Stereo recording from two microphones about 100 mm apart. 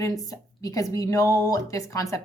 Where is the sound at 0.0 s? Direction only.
35° left (ahead or behind).